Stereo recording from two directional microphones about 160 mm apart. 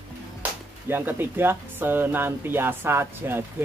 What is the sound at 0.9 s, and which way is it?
Speech, 15° right (ahead or behind).